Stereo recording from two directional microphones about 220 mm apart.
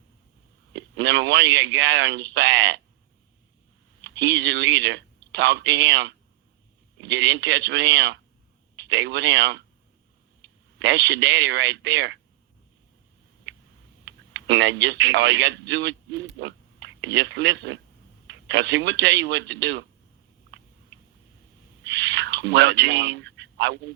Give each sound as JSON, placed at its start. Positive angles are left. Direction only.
{"t": 0.7, "sound": "speech", "side_deg": -55}
{"t": 4.0, "sound": "speech", "side_deg": -55}
{"t": 10.8, "sound": "speech", "side_deg": -55}
{"t": 13.5, "sound": "a sound", "side_deg": -55}
{"t": 14.0, "sound": "speech", "side_deg": -55}
{"t": 21.8, "sound": "speech", "side_deg": -55}